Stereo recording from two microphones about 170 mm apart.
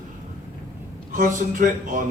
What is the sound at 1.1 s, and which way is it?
Speech, 50° right (ahead or behind).